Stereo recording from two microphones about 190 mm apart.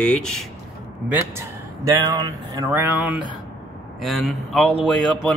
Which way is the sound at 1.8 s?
20° right (ahead or behind).